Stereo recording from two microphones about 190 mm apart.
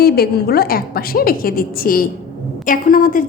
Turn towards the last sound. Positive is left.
turn(degrees=45)  # may be behind; listen again after turning